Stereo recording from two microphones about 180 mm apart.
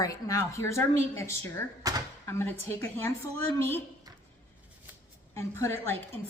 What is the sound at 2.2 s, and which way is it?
A woman's voice, 15° left (ahead or behind).